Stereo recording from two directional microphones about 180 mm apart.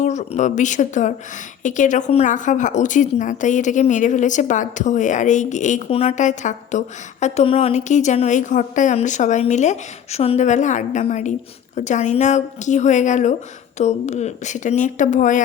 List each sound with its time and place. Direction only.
0.0 s a woman's voice: 40° left (ahead or behind)